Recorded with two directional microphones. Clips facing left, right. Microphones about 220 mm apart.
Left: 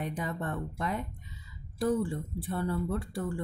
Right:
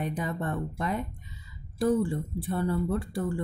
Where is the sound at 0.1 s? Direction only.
10° right (ahead or behind).